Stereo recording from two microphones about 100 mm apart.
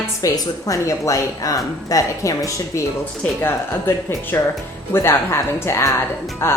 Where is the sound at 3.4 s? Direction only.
20° left (ahead or behind).